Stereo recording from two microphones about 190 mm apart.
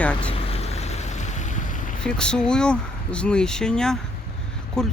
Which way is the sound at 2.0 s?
5° left (ahead or behind).